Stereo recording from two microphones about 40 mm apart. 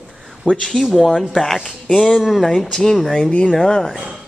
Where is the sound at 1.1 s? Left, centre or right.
Centre.